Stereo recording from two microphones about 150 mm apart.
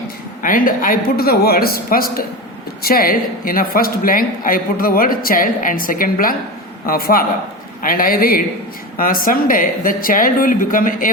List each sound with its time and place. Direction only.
0.4 s a man's voice: 65° left (ahead or behind)